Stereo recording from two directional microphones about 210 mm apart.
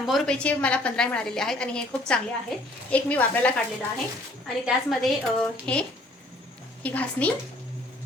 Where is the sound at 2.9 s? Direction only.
5° left (ahead or behind).